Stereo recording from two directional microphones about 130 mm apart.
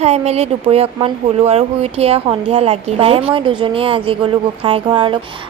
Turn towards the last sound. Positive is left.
turn(degrees=-40)  # may be behind; listen again after turning